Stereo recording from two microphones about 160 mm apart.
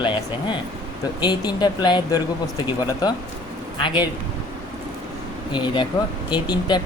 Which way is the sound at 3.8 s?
30° left (ahead or behind).